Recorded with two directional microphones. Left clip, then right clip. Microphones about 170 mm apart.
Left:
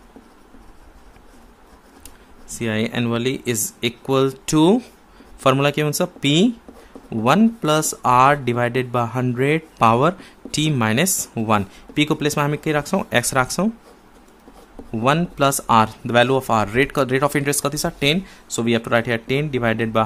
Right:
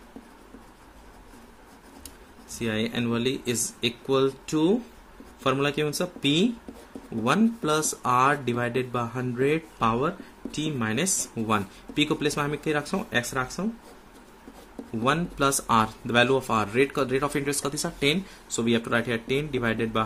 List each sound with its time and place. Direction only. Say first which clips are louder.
2.4 s speech: left 5 dB; 40° left (ahead or behind); by 13.7 s 60° left (ahead or behind)
15.0 s speech: left 6 dB; 40° left (ahead or behind)